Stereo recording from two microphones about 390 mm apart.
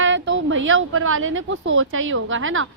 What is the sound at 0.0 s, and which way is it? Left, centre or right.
A woman's voice, right.